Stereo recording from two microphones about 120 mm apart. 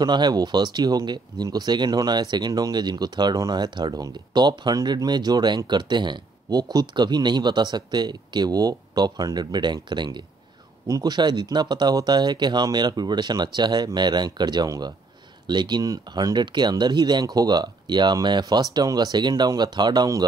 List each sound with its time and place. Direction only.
0.0 s speech: 35° right (ahead or behind)